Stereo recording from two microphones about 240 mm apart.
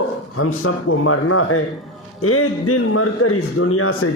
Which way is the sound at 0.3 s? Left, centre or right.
Left.